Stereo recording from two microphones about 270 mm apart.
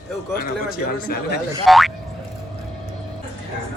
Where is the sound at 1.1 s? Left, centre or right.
Left.